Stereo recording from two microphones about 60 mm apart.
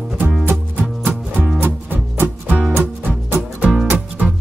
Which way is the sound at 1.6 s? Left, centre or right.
Right.